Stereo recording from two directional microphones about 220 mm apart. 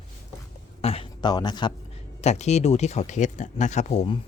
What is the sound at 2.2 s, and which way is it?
Speech, 30° left (ahead or behind).